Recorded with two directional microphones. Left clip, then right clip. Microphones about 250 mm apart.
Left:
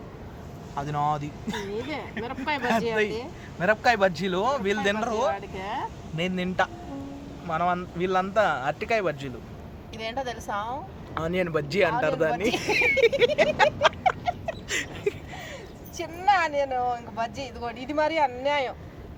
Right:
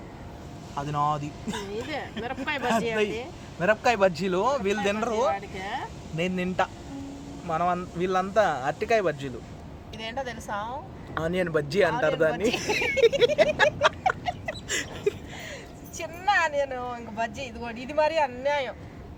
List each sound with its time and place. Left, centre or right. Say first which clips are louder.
0.8 s speech: even; centre
2.2 s speech: left 2 dB; centre
2.6 s speech: even; centre
5.3 s speech: even; centre
6.1 s speech: even; centre
10.0 s speech: left 2 dB; centre
11.1 s speech: even; centre
12.5 s a sound: left 2 dB; centre
16.0 s speech: left 2 dB; centre